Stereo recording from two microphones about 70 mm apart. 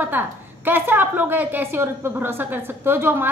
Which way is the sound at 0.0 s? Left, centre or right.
Right.